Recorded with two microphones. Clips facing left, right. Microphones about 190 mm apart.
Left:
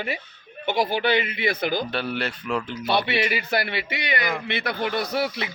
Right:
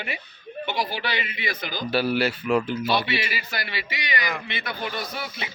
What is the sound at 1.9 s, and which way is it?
Speech, 5° right (ahead or behind).